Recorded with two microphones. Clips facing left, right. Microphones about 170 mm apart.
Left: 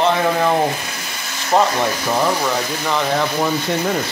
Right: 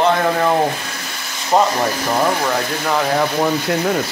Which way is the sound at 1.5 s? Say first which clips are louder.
Right 1 dB; 5° right (ahead or behind).